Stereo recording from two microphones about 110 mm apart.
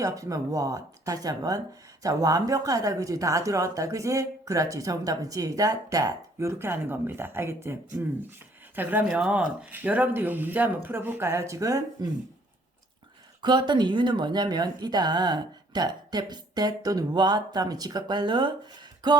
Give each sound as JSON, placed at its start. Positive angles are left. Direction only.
{"t": 0.0, "sound": "speech", "side_deg": -30}
{"t": 13.4, "sound": "speech", "side_deg": -45}